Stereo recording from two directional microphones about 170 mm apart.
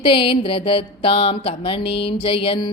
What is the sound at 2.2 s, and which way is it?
Music, 30° left (ahead or behind).